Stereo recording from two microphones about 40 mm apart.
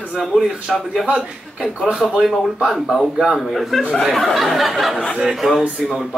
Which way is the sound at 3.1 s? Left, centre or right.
Centre.